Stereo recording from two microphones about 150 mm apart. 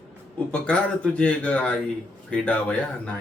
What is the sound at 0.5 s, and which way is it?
Speech, 5° left (ahead or behind).